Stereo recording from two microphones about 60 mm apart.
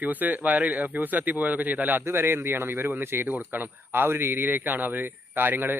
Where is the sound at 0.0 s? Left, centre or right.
Right.